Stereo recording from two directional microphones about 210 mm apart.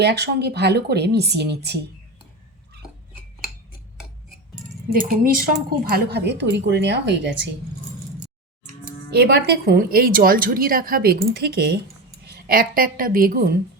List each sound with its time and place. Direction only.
0.0 s a woman's voice: 50° right (ahead or behind)
4.9 s a woman's voice: 45° right (ahead or behind)
9.1 s a woman's voice: 50° right (ahead or behind)